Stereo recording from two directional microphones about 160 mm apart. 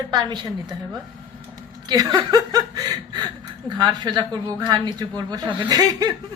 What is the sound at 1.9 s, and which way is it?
A woman's voice, 25° right (ahead or behind).